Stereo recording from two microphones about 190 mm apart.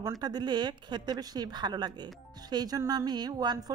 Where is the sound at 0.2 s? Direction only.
20° right (ahead or behind).